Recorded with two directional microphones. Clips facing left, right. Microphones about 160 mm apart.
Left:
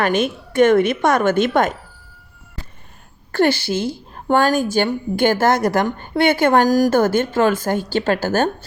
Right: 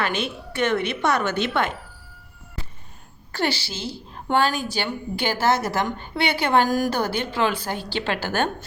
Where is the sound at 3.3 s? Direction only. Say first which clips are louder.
Left 9 dB; 55° left (ahead or behind).